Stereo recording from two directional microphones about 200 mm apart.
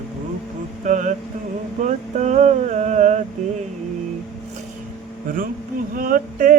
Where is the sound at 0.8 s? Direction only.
40° right (ahead or behind).